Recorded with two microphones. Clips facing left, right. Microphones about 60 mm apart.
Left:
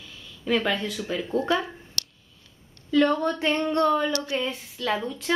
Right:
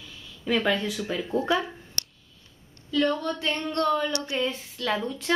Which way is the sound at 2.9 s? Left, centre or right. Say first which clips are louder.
Left 4 dB; left.